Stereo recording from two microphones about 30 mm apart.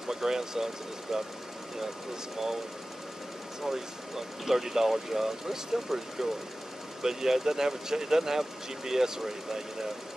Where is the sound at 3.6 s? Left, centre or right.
Centre.